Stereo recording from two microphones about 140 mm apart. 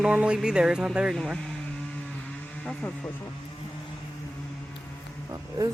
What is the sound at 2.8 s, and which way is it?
Speech, 10° left (ahead or behind).